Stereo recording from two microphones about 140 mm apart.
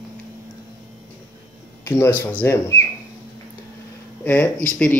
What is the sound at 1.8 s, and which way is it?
Speech, 15° left (ahead or behind).